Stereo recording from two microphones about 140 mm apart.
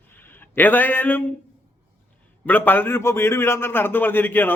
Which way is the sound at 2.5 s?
15° left (ahead or behind).